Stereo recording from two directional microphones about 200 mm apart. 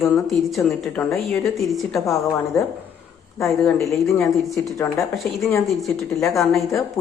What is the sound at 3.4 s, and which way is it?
A woman's voice, 5° left (ahead or behind).